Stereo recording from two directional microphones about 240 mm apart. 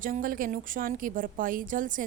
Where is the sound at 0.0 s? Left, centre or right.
Right.